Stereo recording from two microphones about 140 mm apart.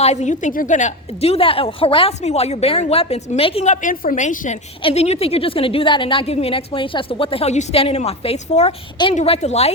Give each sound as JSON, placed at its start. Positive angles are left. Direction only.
{"t": 0.0, "sound": "a woman's voice", "side_deg": 55}
{"t": 4.8, "sound": "a woman's voice", "side_deg": 45}